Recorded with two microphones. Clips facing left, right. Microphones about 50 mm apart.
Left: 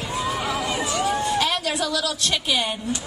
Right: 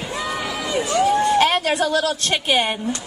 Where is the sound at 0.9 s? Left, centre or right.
Right.